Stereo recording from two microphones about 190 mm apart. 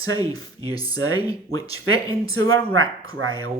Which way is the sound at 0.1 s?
20° left (ahead or behind).